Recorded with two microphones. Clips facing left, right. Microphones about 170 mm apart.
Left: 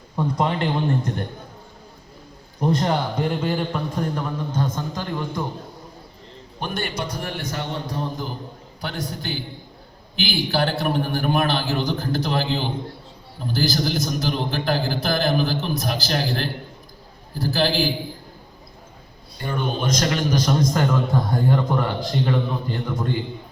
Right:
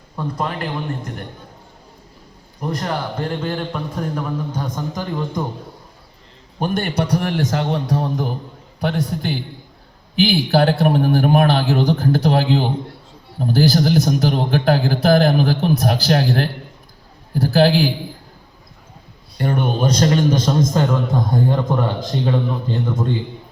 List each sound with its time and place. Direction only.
0.2 s a man's voice: 20° left (ahead or behind)
2.6 s a man's voice: 25° left (ahead or behind)
3.2 s a man's voice: 10° left (ahead or behind)
4.6 s speech: 15° right (ahead or behind)
6.6 s a man's voice: 50° right (ahead or behind); by 8.3 s 85° right
8.8 s a man's voice: 60° right (ahead or behind)
19.4 s a man's voice: 60° right (ahead or behind)
19.8 s a man's voice: 35° right (ahead or behind)